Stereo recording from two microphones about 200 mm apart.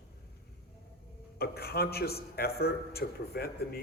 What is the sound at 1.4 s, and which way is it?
A man's voice, 50° left (ahead or behind).